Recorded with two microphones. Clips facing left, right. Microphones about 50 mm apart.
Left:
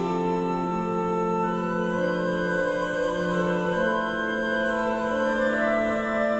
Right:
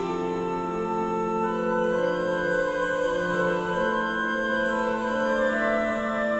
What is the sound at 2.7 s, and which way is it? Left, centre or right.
Music, centre.